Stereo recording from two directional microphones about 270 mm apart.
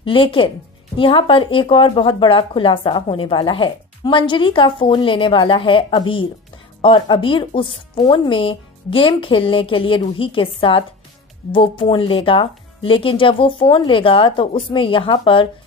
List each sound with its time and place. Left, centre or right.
0.0 s speech: centre